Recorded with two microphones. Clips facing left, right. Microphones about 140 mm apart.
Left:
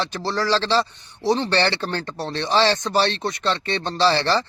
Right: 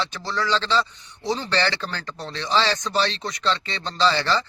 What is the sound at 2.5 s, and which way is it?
Speech, 60° left (ahead or behind).